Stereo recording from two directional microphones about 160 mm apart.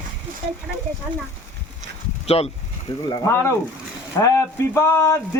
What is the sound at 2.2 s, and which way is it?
Speech, 40° left (ahead or behind).